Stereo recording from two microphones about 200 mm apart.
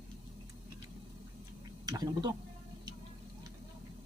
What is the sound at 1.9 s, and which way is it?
Speech, 20° right (ahead or behind).